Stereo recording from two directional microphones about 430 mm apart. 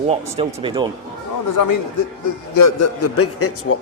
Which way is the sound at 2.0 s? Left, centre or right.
Left.